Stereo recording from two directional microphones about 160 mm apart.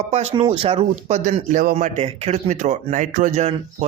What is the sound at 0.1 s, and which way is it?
A man's voice, 40° right (ahead or behind).